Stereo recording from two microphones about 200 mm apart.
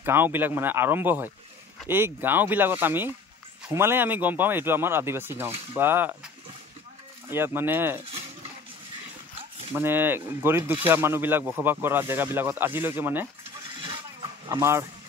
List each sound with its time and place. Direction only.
0.0 s speech: 10° right (ahead or behind)
7.2 s speech: 10° right (ahead or behind)
9.8 s speech: 10° right (ahead or behind)
14.5 s speech: 15° right (ahead or behind)